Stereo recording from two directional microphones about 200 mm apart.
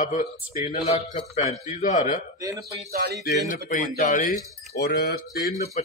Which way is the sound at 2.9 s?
50° right (ahead or behind).